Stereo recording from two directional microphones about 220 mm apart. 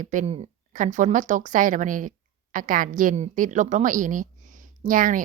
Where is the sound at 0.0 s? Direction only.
35° right (ahead or behind).